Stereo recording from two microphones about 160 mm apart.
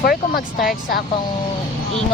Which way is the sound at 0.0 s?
75° left (ahead or behind).